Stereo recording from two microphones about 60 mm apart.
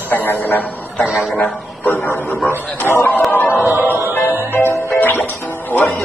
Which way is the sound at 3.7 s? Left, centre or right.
Right.